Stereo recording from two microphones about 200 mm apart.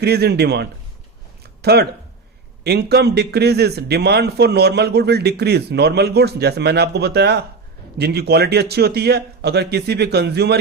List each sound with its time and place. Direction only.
0.0 s a man's voice: 55° right (ahead or behind)